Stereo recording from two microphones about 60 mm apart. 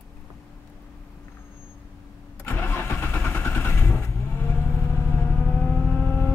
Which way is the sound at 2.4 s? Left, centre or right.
Left.